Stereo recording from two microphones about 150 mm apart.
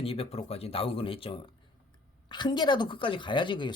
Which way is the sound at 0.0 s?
40° left (ahead or behind).